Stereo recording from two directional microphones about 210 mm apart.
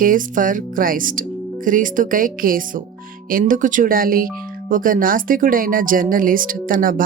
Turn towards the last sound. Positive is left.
turn(degrees=-40)  # may be behind; listen again after turning